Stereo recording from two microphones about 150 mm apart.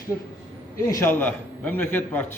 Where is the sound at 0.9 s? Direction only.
20° left (ahead or behind).